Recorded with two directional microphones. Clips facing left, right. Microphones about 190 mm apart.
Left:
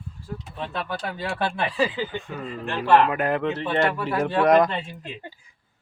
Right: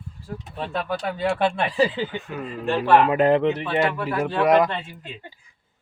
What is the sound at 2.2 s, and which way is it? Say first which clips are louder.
Speech: right 2 dB; centre (ahead or behind).